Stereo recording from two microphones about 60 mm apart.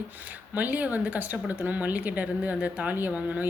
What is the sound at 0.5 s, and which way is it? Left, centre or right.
A woman's voice, right.